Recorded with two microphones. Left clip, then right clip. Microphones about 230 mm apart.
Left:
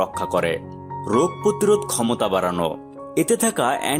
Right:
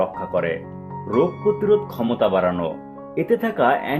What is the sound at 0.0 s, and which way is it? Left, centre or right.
Speech, left.